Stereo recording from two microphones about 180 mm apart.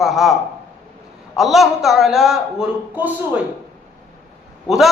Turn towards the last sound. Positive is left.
turn(degrees=0)  # may be behind; listen again after turning